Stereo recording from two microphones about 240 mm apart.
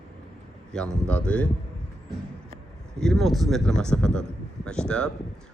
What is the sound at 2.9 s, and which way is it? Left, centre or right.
Speech, centre.